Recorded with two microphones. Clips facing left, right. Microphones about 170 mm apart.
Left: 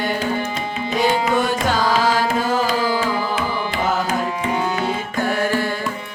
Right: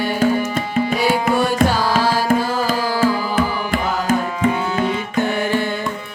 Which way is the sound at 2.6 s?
50° right (ahead or behind).